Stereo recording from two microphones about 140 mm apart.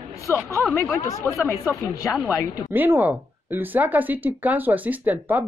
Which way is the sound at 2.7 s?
15° right (ahead or behind).